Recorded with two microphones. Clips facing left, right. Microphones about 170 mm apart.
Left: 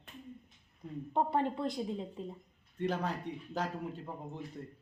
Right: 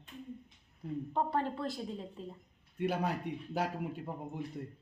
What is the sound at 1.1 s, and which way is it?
A woman's voice, 20° left (ahead or behind).